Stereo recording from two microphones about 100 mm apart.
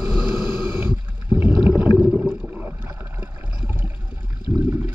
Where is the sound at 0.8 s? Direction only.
20° right (ahead or behind).